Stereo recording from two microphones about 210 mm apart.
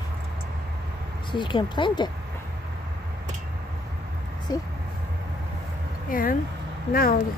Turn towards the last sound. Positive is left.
turn(degrees=45)  # may be behind; listen again after turning